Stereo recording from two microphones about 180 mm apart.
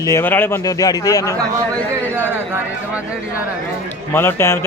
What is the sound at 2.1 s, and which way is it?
Speech, 10° right (ahead or behind).